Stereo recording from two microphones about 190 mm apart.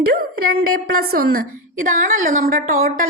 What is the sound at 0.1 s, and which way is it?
A woman's voice, 55° right (ahead or behind).